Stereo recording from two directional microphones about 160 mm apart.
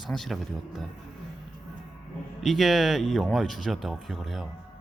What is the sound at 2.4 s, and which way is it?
Speech, centre (ahead or behind).